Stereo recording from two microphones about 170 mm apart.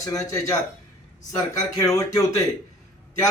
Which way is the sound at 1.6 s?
20° left (ahead or behind).